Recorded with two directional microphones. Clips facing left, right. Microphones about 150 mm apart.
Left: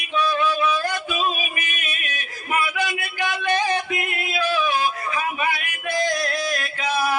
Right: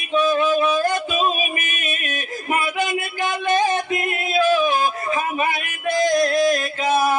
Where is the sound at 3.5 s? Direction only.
50° right (ahead or behind).